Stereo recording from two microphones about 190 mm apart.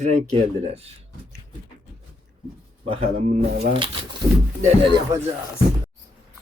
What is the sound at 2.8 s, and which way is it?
A man's voice, 30° right (ahead or behind).